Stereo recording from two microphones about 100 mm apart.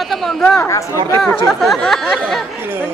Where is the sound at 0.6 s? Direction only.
30° left (ahead or behind).